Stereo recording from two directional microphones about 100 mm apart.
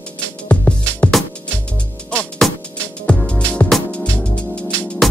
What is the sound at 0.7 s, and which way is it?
Music, 15° left (ahead or behind).